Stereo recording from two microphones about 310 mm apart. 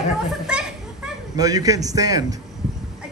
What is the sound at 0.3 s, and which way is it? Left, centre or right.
Children playing, centre.